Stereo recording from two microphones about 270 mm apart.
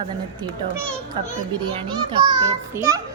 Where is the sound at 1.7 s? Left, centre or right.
Centre.